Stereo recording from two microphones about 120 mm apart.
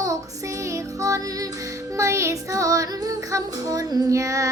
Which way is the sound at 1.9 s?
25° right (ahead or behind).